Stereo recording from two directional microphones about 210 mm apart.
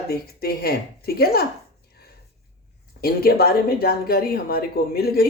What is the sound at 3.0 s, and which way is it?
Speech, 45° left (ahead or behind).